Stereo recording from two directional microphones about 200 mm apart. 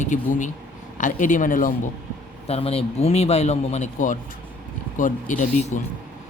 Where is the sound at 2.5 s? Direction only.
30° left (ahead or behind).